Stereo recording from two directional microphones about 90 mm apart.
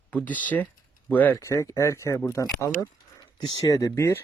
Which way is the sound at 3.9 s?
30° left (ahead or behind).